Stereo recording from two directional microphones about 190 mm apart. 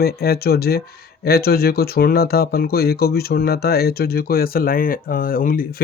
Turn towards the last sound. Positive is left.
turn(degrees=50)  # may be behind; listen again after turning